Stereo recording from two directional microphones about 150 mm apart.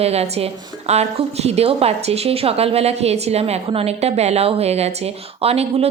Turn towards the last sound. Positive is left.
turn(degrees=-40)  # may be behind; listen again after turning